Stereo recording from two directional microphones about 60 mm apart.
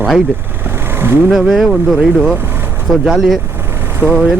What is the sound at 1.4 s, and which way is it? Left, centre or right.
Speech, centre.